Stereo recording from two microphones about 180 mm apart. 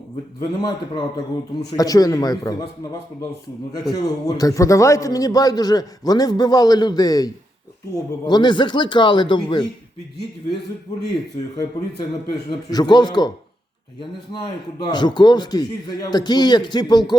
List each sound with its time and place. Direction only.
0.3 s a man's voice: 20° left (ahead or behind)
3.8 s a man's voice: 20° left (ahead or behind)
12.5 s a man's voice: 25° left (ahead or behind)
14.8 s a man's voice: 25° left (ahead or behind)